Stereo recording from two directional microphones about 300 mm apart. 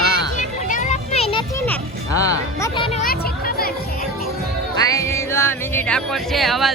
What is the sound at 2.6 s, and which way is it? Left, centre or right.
Music, centre.